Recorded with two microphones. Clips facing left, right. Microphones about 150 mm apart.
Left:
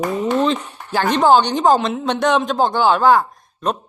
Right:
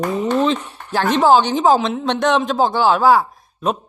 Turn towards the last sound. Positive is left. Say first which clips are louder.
# right 1 dB
turn(degrees=-5)  # may be behind; listen again after turning